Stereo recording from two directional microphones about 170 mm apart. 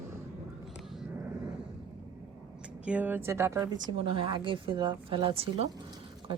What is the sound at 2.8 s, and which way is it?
Speech, 10° right (ahead or behind).